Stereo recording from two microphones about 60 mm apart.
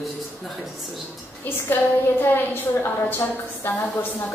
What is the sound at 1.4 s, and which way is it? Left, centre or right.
A woman's voice, left.